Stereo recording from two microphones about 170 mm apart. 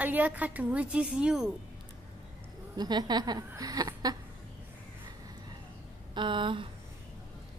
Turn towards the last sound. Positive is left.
turn(degrees=-30)  # may be behind; listen again after turning